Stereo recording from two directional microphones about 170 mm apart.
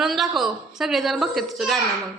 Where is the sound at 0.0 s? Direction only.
Centre (ahead or behind).